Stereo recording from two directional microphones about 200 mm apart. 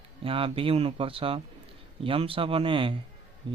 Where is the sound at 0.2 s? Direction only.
25° right (ahead or behind).